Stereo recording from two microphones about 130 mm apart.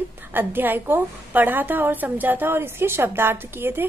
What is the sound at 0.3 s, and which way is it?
A woman's voice, 15° right (ahead or behind).